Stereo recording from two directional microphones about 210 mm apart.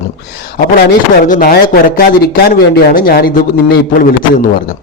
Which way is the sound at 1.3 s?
45° left (ahead or behind).